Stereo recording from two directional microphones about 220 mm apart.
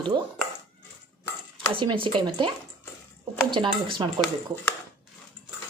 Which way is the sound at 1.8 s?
20° right (ahead or behind).